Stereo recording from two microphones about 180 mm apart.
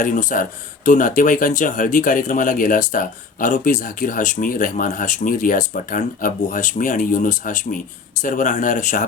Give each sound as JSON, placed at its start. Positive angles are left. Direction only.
{"t": 0.0, "sound": "speech", "side_deg": 45}